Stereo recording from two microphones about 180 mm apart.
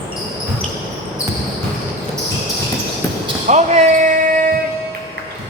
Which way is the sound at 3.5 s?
40° right (ahead or behind).